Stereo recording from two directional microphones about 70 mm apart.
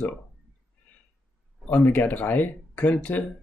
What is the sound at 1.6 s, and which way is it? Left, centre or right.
Speech, left.